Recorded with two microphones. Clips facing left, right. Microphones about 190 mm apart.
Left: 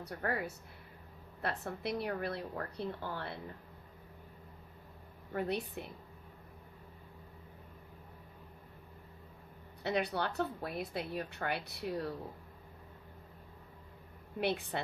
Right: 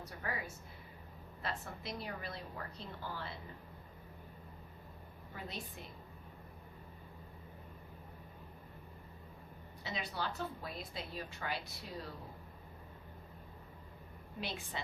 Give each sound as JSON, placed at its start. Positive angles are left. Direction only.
{"t": 0.0, "sound": "a woman's voice", "side_deg": 60}
{"t": 5.3, "sound": "a woman's voice", "side_deg": 60}
{"t": 9.8, "sound": "a woman's voice", "side_deg": 65}
{"t": 14.4, "sound": "a woman's voice", "side_deg": 60}